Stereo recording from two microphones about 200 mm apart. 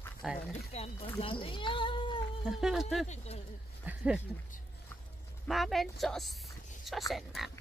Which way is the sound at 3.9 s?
5° right (ahead or behind).